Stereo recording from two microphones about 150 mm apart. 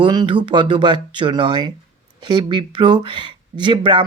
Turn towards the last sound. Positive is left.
turn(degrees=-30)  # may be behind; listen again after turning